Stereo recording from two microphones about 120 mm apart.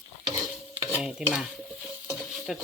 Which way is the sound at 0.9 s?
5° right (ahead or behind).